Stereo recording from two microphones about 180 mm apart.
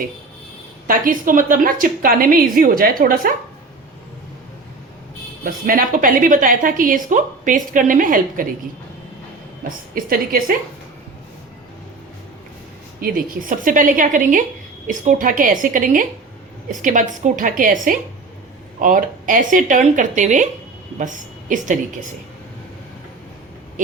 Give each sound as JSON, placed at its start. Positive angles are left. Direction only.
{"t": 0.9, "sound": "a woman's voice", "side_deg": -50}
{"t": 5.4, "sound": "a woman's voice", "side_deg": -50}
{"t": 9.6, "sound": "a woman's voice", "side_deg": -55}
{"t": 13.0, "sound": "a woman's voice", "side_deg": -50}